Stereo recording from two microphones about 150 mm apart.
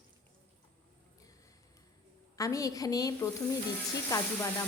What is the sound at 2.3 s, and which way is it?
A woman's voice, 20° left (ahead or behind).